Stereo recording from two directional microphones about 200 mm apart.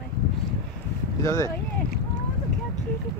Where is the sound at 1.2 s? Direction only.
15° left (ahead or behind).